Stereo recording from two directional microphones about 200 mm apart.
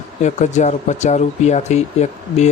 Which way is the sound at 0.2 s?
35° left (ahead or behind).